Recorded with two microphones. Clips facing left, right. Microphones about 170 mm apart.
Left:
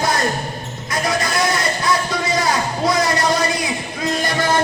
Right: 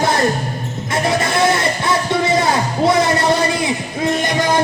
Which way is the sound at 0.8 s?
25° right (ahead or behind).